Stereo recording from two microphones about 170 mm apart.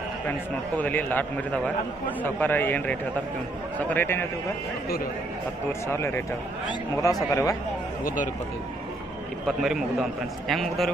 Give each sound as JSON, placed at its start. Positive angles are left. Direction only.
{"t": 0.8, "sound": "a man's voice", "side_deg": 10}
{"t": 5.9, "sound": "a man's voice", "side_deg": 15}
{"t": 8.0, "sound": "speech", "side_deg": 50}
{"t": 9.5, "sound": "a man's voice", "side_deg": 0}